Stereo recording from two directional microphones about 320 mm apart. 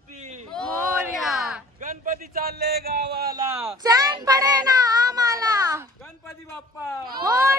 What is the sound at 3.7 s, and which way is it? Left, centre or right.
Child singing, centre.